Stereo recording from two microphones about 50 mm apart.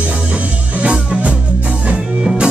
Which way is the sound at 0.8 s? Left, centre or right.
Right.